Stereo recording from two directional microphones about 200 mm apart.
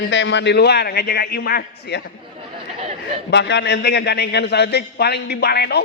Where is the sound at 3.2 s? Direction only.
60° left (ahead or behind).